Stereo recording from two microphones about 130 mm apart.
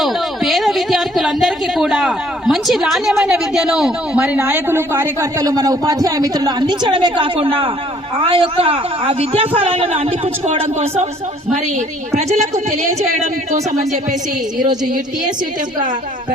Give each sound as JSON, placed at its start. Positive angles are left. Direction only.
{"t": 0.0, "sound": "a sound", "side_deg": 0}
{"t": 4.4, "sound": "a man's voice", "side_deg": -20}
{"t": 12.1, "sound": "a man's voice", "side_deg": -65}